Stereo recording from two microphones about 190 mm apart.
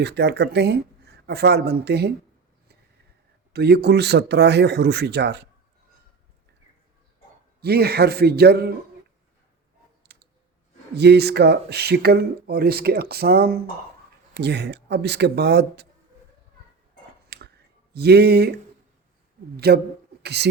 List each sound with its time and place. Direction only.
0.0 s speech: 60° right (ahead or behind)
3.5 s speech: 60° right (ahead or behind)
7.6 s speech: 55° right (ahead or behind)
10.0 s clicking: 60° right (ahead or behind)
10.9 s speech: 60° right (ahead or behind)
17.2 s a sound: 60° right (ahead or behind)
17.9 s speech: 60° right (ahead or behind)
19.5 s speech: 55° right (ahead or behind)